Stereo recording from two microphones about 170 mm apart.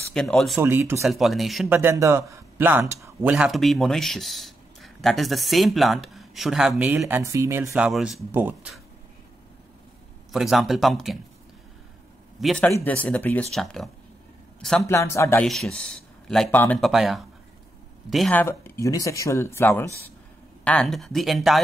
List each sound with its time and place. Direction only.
0.1 s speech: 5° left (ahead or behind)
0.6 s speech: 15° right (ahead or behind)
1.0 s speech: centre (ahead or behind)
1.7 s speech: 15° right (ahead or behind)
10.3 s speech: centre (ahead or behind)
12.4 s speech: 5° left (ahead or behind)
14.9 s speech: 15° left (ahead or behind)
15.4 s speech: centre (ahead or behind)
18.4 s speech: 15° left (ahead or behind)
20.6 s speech: 5° left (ahead or behind)